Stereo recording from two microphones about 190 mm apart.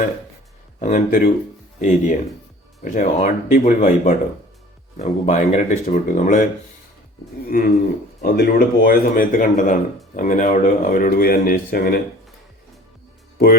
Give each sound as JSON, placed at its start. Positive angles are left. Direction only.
{"t": 0.8, "sound": "speech", "side_deg": 45}
{"t": 7.5, "sound": "speech", "side_deg": 50}